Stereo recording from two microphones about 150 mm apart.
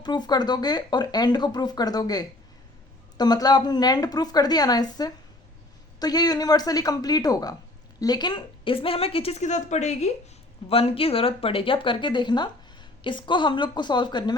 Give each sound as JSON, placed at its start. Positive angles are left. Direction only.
{"t": 0.0, "sound": "a woman's voice", "side_deg": 30}